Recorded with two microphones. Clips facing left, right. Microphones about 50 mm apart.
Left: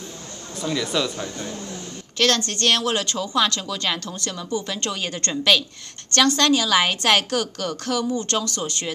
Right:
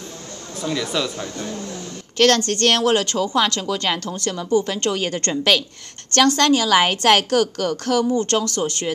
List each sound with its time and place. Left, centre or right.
0.7 s speech: centre
1.2 s a woman's voice: right